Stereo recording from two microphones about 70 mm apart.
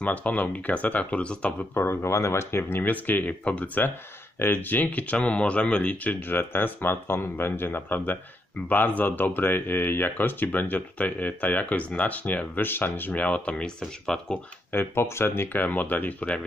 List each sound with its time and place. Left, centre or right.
0.0 s speech: left
1.7 s speech: left; by 14.4 s centre
14.7 s speech: left; by 16.4 s centre